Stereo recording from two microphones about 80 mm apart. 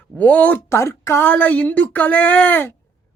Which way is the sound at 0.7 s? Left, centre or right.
Left.